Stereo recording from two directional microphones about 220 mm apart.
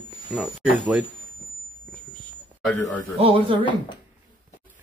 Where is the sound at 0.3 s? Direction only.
5° right (ahead or behind).